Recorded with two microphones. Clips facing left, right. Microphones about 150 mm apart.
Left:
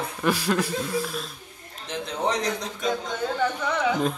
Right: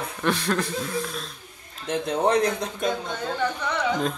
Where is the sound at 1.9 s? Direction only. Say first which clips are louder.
Right 5 dB; 55° right (ahead or behind).